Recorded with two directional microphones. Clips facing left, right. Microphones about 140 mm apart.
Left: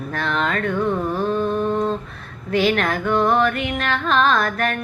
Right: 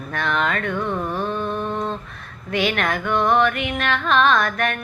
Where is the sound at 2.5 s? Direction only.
35° left (ahead or behind).